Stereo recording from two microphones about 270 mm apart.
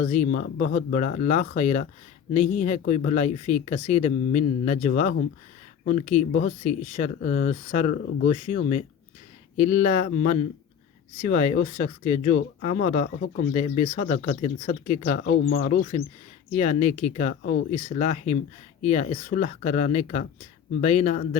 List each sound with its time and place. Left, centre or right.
0.0 s speech: left